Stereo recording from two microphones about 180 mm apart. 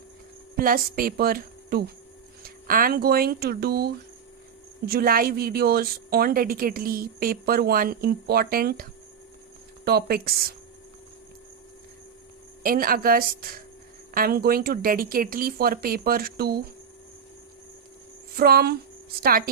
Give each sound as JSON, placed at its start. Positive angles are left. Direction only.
{"t": 0.5, "sound": "a woman's voice", "side_deg": -55}
{"t": 12.6, "sound": "a woman's voice", "side_deg": -55}
{"t": 18.3, "sound": "a woman's voice", "side_deg": -60}